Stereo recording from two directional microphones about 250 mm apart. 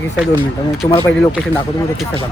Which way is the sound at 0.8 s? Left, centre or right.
Centre.